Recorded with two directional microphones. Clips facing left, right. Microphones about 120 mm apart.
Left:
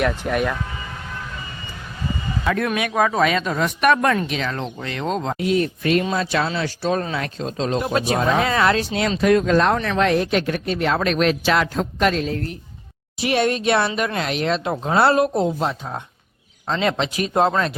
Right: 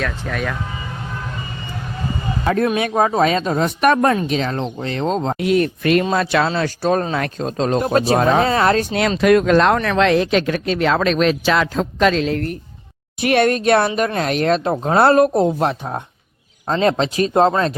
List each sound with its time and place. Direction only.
0.0 s speech: 10° left (ahead or behind)
2.4 s speech: 35° right (ahead or behind)
5.4 s speech: 65° right (ahead or behind); by 9.0 s 45° right (ahead or behind)
9.0 s speech: 70° right (ahead or behind); by 10.9 s 90° right
12.1 s speech: 80° right; by 12.5 s 65° right (ahead or behind)
13.2 s speech: 55° right (ahead or behind)
16.6 s speech: 40° right (ahead or behind)